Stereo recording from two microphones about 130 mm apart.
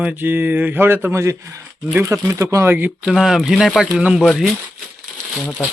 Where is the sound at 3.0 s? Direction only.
Centre (ahead or behind).